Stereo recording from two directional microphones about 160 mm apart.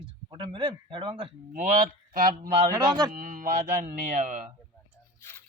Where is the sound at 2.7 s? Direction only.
25° right (ahead or behind).